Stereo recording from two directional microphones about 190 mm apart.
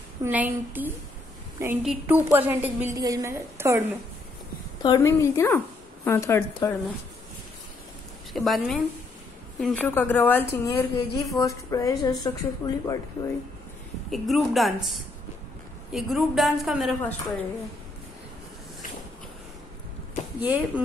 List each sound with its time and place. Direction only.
0.2 s a woman's voice: 10° right (ahead or behind)
4.8 s a woman's voice: 20° left (ahead or behind)
8.3 s a woman's voice: centre (ahead or behind); by 12.9 s 20° left (ahead or behind)
14.1 s a woman's voice: centre (ahead or behind)
20.3 s a woman's voice: 10° right (ahead or behind)